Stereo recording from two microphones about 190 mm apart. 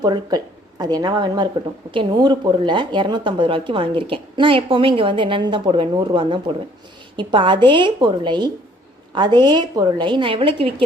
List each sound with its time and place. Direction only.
0.0 s speech: 20° right (ahead or behind)